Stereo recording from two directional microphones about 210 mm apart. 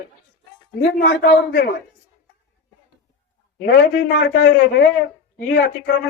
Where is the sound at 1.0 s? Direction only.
50° left (ahead or behind).